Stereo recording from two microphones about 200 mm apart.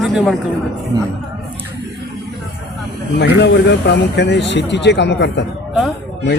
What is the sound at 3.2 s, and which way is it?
A man's voice, 60° left (ahead or behind).